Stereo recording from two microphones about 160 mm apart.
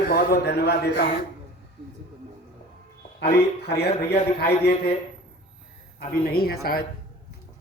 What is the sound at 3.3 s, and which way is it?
A man's voice, 90° left.